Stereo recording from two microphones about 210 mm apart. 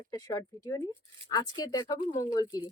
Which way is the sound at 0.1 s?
15° left (ahead or behind).